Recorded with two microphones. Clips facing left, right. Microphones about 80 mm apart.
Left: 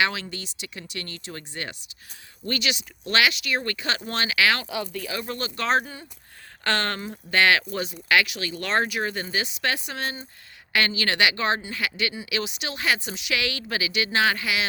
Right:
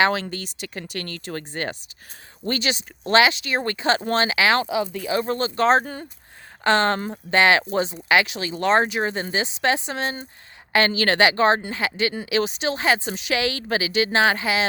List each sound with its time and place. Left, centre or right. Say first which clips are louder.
0.0 s speech: right 5 dB; right